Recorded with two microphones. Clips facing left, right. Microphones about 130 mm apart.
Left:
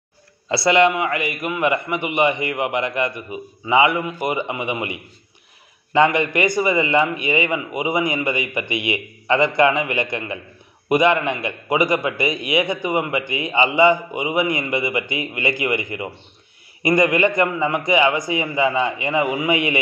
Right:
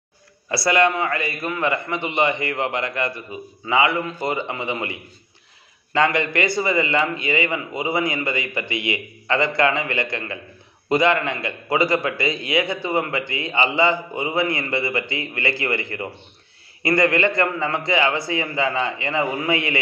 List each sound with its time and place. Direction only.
0.5 s a man's voice: 20° left (ahead or behind)